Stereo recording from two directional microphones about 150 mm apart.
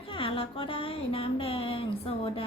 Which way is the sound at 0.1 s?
35° left (ahead or behind).